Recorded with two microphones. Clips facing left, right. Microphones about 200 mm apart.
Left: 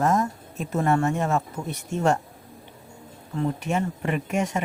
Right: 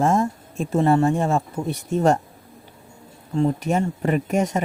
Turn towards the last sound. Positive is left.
turn(degrees=-40)  # may be behind; listen again after turning